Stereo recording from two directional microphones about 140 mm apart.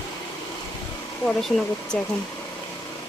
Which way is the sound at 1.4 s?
Centre (ahead or behind).